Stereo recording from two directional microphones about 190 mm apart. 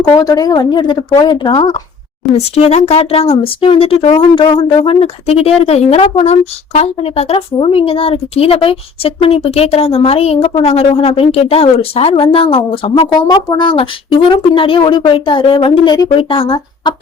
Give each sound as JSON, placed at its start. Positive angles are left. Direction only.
{"t": 0.1, "sound": "speech", "side_deg": 20}